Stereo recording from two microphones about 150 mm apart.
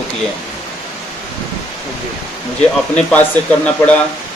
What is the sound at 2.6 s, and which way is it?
Speech, 10° left (ahead or behind).